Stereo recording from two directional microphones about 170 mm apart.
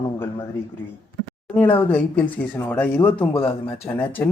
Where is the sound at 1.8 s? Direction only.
10° left (ahead or behind).